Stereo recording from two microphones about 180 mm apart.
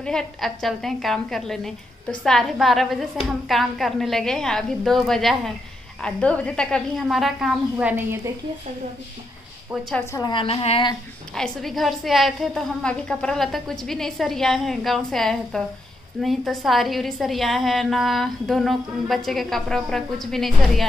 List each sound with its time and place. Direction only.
0.0 s a woman's voice: 5° left (ahead or behind)
10.1 s a woman's voice: 25° left (ahead or behind)
11.3 s a woman's voice: centre (ahead or behind)